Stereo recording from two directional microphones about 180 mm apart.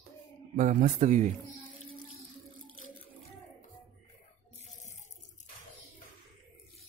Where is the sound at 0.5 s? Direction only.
45° right (ahead or behind).